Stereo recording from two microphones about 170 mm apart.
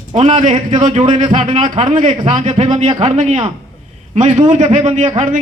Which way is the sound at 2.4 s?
45° right (ahead or behind).